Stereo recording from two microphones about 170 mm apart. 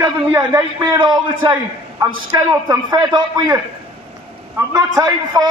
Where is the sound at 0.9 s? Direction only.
25° right (ahead or behind).